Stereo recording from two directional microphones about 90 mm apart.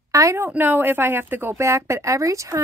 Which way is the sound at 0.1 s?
35° right (ahead or behind).